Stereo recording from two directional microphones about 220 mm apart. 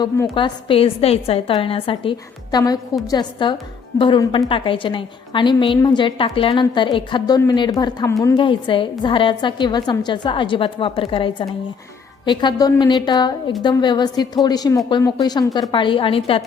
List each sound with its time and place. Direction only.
0.0 s a woman's voice: 20° left (ahead or behind)